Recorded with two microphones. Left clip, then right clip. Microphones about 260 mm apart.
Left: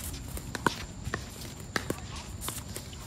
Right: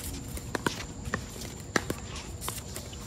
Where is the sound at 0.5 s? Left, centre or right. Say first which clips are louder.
Left 2 dB; right.